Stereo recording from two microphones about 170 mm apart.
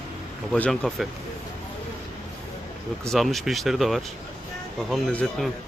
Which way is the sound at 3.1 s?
Centre (ahead or behind).